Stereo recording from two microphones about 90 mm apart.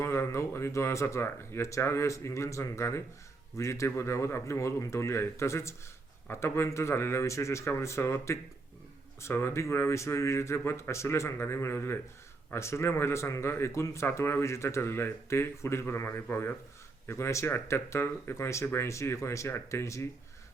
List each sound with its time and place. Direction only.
0.0 s speech: 30° left (ahead or behind)